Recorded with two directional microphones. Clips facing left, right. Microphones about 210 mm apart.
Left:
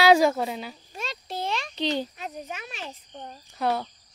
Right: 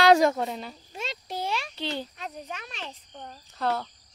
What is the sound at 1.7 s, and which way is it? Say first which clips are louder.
Speech: left 5 dB; 15° left (ahead or behind).